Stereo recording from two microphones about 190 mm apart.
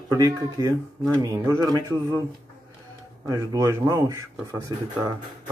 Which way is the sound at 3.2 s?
15° right (ahead or behind).